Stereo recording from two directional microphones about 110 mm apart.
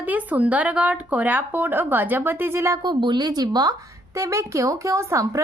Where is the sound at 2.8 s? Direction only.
45° right (ahead or behind).